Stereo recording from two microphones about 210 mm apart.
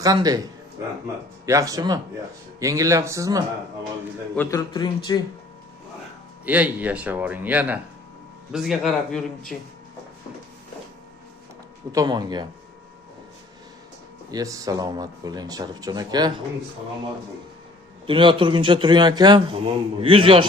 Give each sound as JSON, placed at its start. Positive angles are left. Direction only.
{"t": 0.0, "sound": "speech", "side_deg": -15}
{"t": 1.5, "sound": "speech", "side_deg": -15}
{"t": 4.4, "sound": "a man's voice", "side_deg": 20}
{"t": 6.4, "sound": "a man's voice", "side_deg": -5}
{"t": 11.9, "sound": "a man's voice", "side_deg": -20}
{"t": 14.3, "sound": "a man's voice", "side_deg": -15}
{"t": 18.0, "sound": "a man's voice", "side_deg": -25}